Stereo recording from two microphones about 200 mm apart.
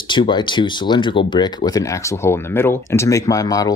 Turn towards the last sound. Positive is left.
turn(degrees=15)  # may be behind; listen again after turning